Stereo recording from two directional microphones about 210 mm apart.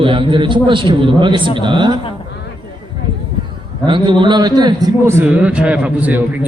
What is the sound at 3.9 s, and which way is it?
A man's voice, 20° right (ahead or behind).